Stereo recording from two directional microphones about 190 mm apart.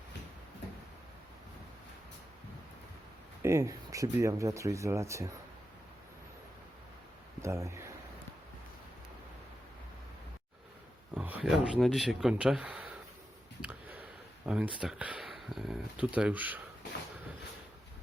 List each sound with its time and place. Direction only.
3.4 s speech: 15° right (ahead or behind)
7.4 s speech: 15° right (ahead or behind)
11.1 s speech: 10° right (ahead or behind)
13.6 s a sound: 10° right (ahead or behind)